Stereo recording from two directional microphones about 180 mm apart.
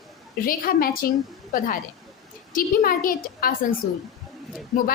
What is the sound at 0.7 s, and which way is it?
Speech, 55° left (ahead or behind).